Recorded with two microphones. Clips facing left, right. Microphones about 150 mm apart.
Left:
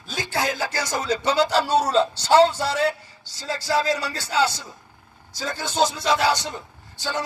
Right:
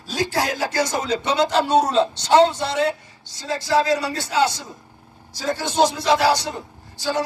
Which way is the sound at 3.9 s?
30° right (ahead or behind).